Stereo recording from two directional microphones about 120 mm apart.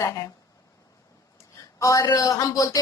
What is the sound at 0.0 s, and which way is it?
Speech, 25° left (ahead or behind).